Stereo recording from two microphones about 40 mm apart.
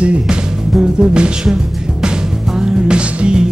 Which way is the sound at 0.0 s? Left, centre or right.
Right.